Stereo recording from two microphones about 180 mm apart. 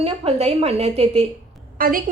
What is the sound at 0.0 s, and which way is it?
A woman's voice, 35° right (ahead or behind).